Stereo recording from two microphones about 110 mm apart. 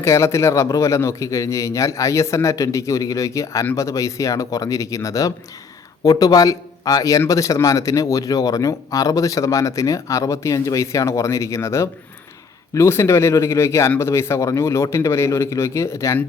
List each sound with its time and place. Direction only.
0.0 s a man's voice: 25° left (ahead or behind)